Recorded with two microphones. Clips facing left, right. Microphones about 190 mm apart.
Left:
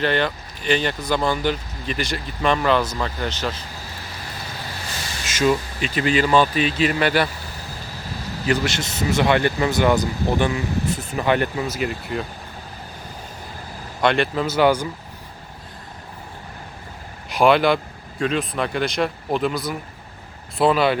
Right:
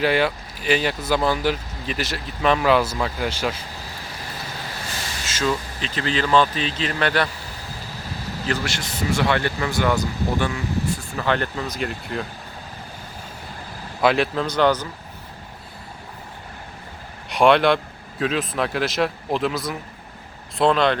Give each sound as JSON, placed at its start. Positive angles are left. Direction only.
{"t": 0.0, "sound": "speech", "side_deg": -5}
{"t": 5.2, "sound": "speech", "side_deg": 15}
{"t": 8.4, "sound": "speech", "side_deg": 20}
{"t": 14.0, "sound": "speech", "side_deg": 0}
{"t": 17.2, "sound": "speech", "side_deg": 0}